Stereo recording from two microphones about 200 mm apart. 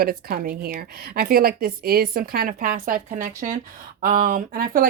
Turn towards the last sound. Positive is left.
turn(degrees=-45)  # may be behind; listen again after turning